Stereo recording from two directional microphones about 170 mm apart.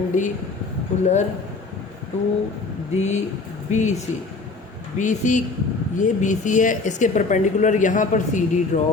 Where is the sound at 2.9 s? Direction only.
45° left (ahead or behind).